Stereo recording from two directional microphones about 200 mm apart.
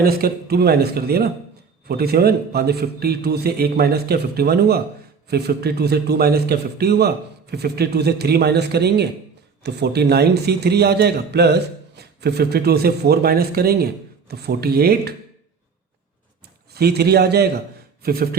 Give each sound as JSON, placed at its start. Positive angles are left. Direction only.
{"t": 0.0, "sound": "a man's voice", "side_deg": -50}
{"t": 16.7, "sound": "a man's voice", "side_deg": -55}